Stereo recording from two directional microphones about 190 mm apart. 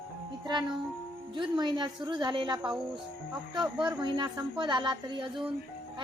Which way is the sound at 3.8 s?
25° right (ahead or behind).